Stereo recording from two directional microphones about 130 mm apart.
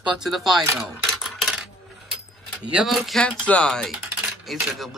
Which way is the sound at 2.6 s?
5° right (ahead or behind).